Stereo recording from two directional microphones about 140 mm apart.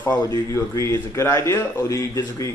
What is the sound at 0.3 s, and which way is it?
A man's voice, 20° left (ahead or behind).